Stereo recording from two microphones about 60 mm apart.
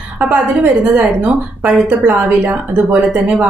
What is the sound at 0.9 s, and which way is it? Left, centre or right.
A woman's voice, right.